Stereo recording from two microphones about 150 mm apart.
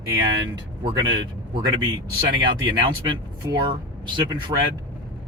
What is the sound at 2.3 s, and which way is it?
Speech, 35° right (ahead or behind).